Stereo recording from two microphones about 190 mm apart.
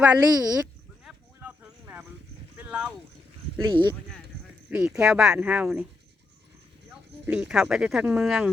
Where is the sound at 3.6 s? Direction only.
25° right (ahead or behind).